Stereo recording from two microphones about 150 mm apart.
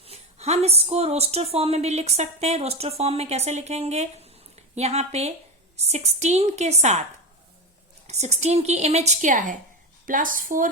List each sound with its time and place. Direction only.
0.0 s a woman's voice: 45° right (ahead or behind)
8.0 s a woman's voice: 45° right (ahead or behind)